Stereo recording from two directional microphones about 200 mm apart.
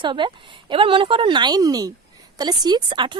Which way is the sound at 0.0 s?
25° right (ahead or behind).